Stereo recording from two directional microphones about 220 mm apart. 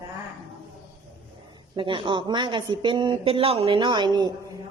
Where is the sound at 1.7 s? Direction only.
20° right (ahead or behind).